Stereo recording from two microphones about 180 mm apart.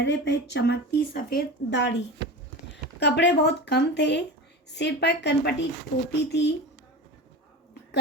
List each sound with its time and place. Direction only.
0.0 s speech: 70° left (ahead or behind)
3.0 s speech: 75° left (ahead or behind)